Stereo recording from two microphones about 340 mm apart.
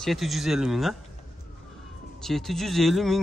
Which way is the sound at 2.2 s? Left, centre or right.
Centre.